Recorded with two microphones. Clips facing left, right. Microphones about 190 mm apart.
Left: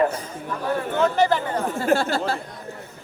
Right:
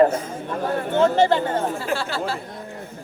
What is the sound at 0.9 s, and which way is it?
Speech, 25° right (ahead or behind).